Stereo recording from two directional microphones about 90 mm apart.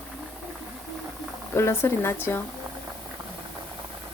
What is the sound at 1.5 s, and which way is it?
Speech, 30° left (ahead or behind).